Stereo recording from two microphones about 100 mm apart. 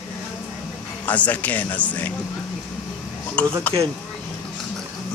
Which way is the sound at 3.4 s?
15° left (ahead or behind).